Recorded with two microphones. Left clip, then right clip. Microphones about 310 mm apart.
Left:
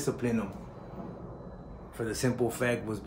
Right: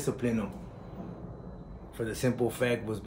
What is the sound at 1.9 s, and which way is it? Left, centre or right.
Speech, centre.